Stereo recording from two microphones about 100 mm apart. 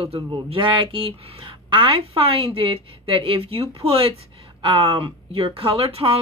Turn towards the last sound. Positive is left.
turn(degrees=-70)  # may be behind; listen again after turning